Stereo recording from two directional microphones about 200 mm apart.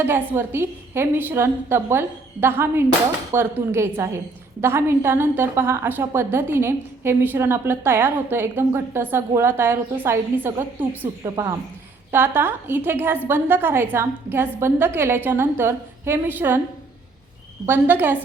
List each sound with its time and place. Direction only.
0.0 s a woman's voice: 10° right (ahead or behind)
17.7 s a woman's voice: 10° right (ahead or behind)